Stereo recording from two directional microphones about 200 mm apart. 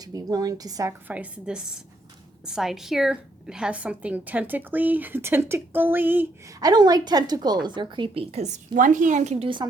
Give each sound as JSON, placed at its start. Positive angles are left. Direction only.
{"t": 0.0, "sound": "a woman's voice", "side_deg": -20}